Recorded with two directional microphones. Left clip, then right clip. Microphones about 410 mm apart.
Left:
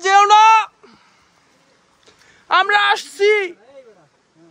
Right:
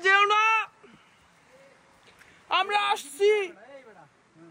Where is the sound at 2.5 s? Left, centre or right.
Left.